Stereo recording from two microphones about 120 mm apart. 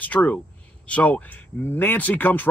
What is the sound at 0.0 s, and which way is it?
Speech, 10° left (ahead or behind).